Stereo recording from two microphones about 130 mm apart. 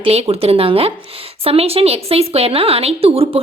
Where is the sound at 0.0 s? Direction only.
50° right (ahead or behind).